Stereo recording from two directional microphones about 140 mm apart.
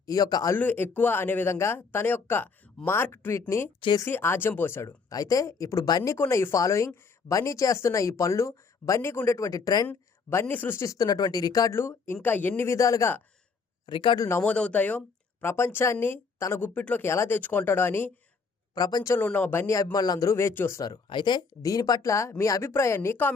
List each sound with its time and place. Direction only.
0.0 s speech: 25° left (ahead or behind)
0.5 s speech: 15° left (ahead or behind)
3.8 s speech: 35° left (ahead or behind)
4.0 s speech: 15° left (ahead or behind)
9.9 s a sound: 15° left (ahead or behind)
10.4 s speech: 15° left (ahead or behind)
13.8 s speech: 35° left (ahead or behind)
14.3 s speech: 15° left (ahead or behind)
18.7 s speech: 30° left (ahead or behind)
20.9 s speech: 35° left (ahead or behind); by 23.3 s 15° left (ahead or behind)